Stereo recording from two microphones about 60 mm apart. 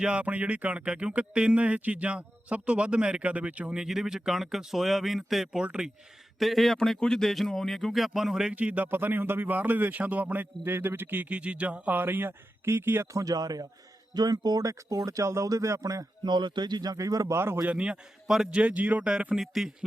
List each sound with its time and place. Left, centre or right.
0.0 s speech: right
3.8 s speech: centre
5.5 s speech: centre
6.4 s speech: centre
8.5 s speech: right
8.9 s a man's voice: right
11.3 s a man's voice: right
13.1 s speech: right
15.4 s speech: right
16.9 s speech: right
17.3 s speech: right
17.6 s speech: centre
19.4 s speech: centre